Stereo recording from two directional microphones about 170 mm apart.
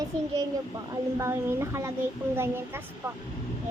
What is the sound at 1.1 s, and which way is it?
A woman's voice, 15° right (ahead or behind).